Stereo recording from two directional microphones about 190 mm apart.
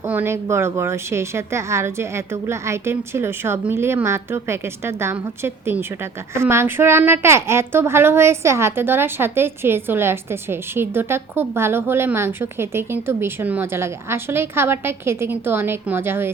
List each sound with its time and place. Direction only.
0.1 s a woman's voice: 10° right (ahead or behind)